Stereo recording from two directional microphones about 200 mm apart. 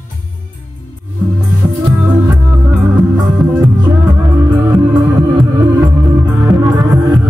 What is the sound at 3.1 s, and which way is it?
Music, 15° right (ahead or behind).